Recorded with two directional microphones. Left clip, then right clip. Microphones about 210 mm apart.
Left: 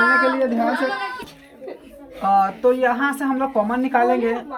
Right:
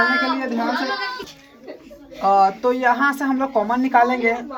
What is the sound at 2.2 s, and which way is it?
A woman's voice, 5° right (ahead or behind).